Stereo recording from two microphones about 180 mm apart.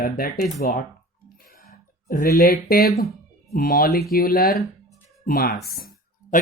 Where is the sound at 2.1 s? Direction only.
55° left (ahead or behind).